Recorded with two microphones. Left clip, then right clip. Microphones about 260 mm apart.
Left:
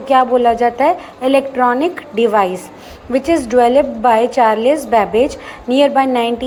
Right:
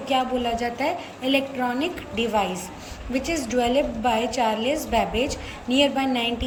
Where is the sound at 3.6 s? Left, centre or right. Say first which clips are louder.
Left 11 dB; left.